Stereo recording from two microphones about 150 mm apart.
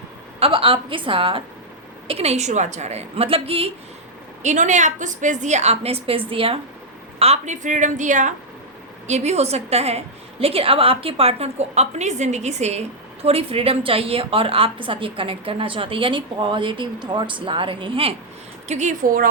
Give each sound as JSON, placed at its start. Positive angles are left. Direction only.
{"t": 0.3, "sound": "a woman's voice", "side_deg": -40}
{"t": 4.4, "sound": "a woman's voice", "side_deg": -55}
{"t": 7.2, "sound": "a woman's voice", "side_deg": -50}
{"t": 18.7, "sound": "a woman's voice", "side_deg": -55}